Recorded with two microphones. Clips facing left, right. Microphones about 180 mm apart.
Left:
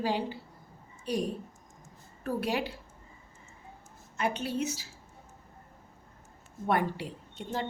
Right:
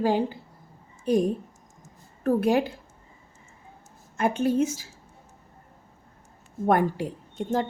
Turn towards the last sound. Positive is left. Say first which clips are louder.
# right 9 dB
turn(degrees=-45)  # may be behind; listen again after turning